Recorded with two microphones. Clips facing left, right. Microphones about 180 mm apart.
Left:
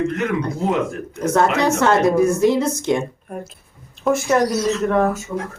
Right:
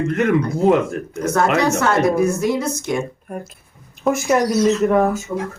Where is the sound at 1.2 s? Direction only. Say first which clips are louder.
Even; 25° left (ahead or behind).